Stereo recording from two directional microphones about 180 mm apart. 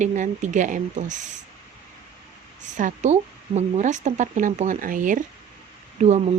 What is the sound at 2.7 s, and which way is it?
Speech, 40° right (ahead or behind).